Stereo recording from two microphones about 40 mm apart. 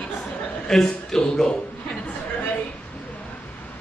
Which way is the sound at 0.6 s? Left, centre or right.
Centre.